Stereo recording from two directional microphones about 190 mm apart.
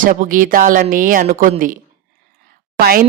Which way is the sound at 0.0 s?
45° right (ahead or behind).